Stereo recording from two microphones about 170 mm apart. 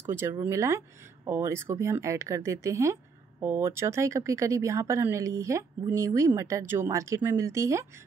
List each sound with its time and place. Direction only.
0.0 s speech: 15° right (ahead or behind)